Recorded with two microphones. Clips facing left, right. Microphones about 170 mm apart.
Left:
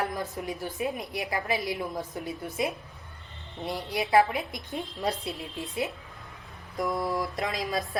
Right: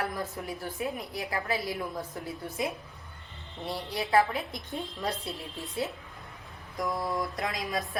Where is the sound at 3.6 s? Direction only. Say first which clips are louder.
Left 2 dB; 15° left (ahead or behind).